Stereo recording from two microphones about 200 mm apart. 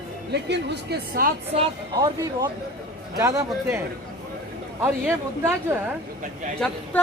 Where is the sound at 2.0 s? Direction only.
20° right (ahead or behind).